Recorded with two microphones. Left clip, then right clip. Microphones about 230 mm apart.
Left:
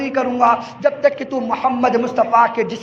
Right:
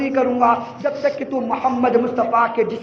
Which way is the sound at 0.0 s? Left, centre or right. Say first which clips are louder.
Left 1 dB; left.